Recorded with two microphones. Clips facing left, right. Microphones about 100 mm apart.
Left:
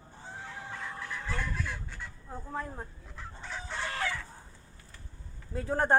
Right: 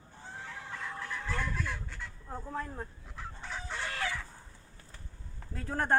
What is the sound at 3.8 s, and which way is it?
Chicken, 30° left (ahead or behind).